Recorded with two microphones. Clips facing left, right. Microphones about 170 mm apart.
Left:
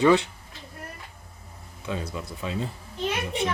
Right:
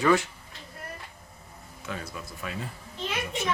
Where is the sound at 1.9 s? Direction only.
20° left (ahead or behind).